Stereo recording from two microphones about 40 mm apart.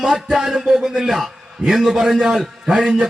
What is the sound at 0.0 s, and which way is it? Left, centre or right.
A man's voice, centre.